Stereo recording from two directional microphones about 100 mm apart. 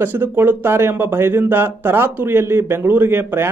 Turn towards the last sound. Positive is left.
turn(degrees=-20)  # may be behind; listen again after turning